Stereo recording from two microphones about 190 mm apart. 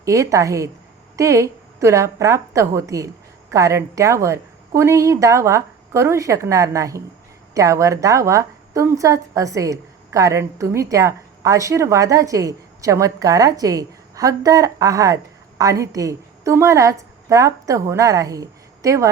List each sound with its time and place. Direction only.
0.0 s a woman's voice: 15° right (ahead or behind)